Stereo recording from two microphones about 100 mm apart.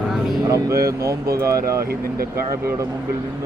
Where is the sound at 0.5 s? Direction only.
30° right (ahead or behind).